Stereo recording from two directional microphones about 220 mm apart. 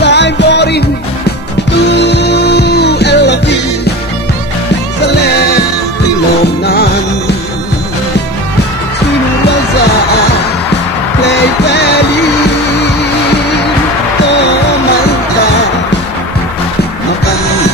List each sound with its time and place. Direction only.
0.0 s music: 50° left (ahead or behind)
1.9 s music: 50° left (ahead or behind)
11.2 s music: 50° left (ahead or behind)